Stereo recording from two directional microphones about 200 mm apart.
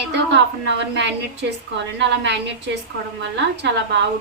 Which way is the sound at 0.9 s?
60° right (ahead or behind).